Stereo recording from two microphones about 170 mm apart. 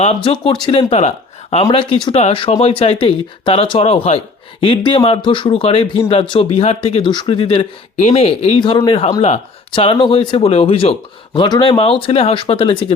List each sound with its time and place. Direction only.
0.0 s speech: 35° left (ahead or behind)